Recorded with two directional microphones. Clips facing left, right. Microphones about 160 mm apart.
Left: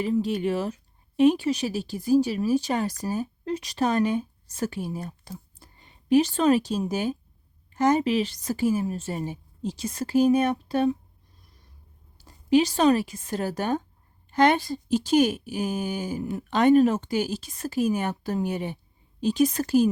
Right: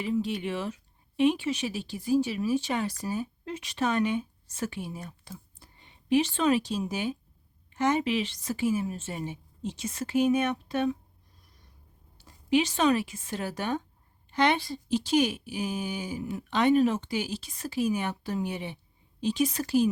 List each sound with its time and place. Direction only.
0.0 s a woman's voice: 40° left (ahead or behind)
12.1 s speech: 40° left (ahead or behind)